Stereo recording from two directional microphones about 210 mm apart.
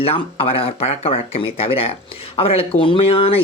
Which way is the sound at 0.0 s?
25° left (ahead or behind).